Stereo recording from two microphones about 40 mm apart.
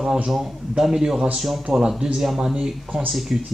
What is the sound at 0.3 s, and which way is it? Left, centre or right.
Speech, centre.